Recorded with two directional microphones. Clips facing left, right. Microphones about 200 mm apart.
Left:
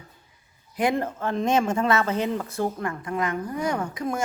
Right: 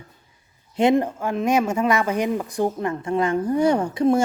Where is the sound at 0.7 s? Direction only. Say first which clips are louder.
Right 6 dB; 25° right (ahead or behind).